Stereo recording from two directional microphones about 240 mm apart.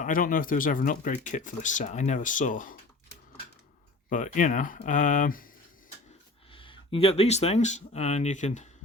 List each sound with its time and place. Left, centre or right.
0.0 s speech: left
4.1 s speech: left
6.5 s speech: left